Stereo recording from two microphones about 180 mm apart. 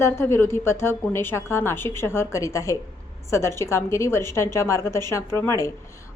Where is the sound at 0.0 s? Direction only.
15° left (ahead or behind).